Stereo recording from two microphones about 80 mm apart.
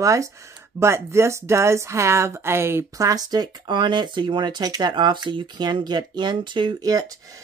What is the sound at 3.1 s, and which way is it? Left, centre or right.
Speech, right.